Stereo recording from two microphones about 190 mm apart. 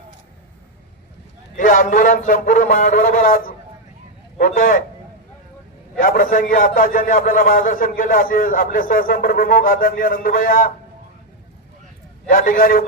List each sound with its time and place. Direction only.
1.5 s a man's voice: 45° left (ahead or behind)
6.0 s a man's voice: 45° left (ahead or behind)
12.3 s a man's voice: 50° left (ahead or behind)